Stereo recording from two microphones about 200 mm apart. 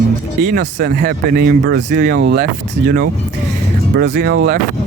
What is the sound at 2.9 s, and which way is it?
Speech, 45° right (ahead or behind).